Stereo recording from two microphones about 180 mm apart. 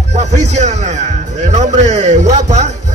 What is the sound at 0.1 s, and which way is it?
A man's voice, 40° right (ahead or behind).